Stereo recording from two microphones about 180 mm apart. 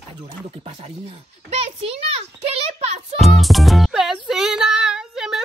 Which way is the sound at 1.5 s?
35° right (ahead or behind).